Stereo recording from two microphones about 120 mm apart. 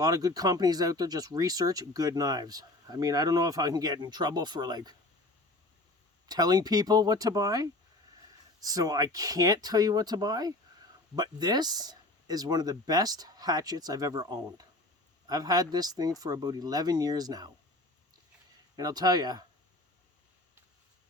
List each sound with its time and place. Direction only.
0.0 s speech: 30° right (ahead or behind)
6.2 s speech: 35° right (ahead or behind)
18.8 s speech: 35° right (ahead or behind)